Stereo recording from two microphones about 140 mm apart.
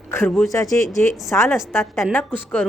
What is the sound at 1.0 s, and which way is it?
A woman's voice, 15° left (ahead or behind).